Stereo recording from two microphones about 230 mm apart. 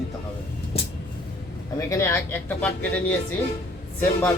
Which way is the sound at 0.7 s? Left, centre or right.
Left.